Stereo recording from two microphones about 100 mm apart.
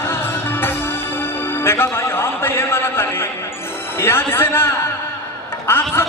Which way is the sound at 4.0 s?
25° left (ahead or behind).